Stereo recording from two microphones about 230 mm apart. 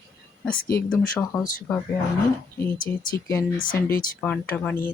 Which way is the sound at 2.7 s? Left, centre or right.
Left.